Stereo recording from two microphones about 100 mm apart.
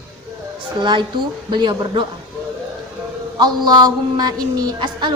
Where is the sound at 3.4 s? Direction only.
45° right (ahead or behind).